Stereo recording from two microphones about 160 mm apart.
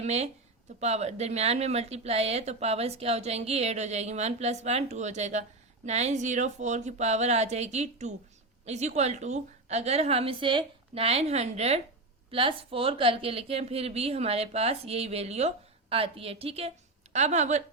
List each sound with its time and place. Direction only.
0.0 s a woman's voice: 45° right (ahead or behind)